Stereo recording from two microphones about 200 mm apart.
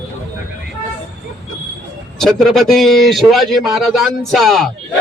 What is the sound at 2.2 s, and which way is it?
A man's voice, centre (ahead or behind).